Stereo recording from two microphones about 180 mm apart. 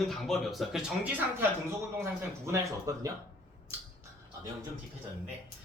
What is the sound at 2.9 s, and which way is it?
Speech, 15° right (ahead or behind).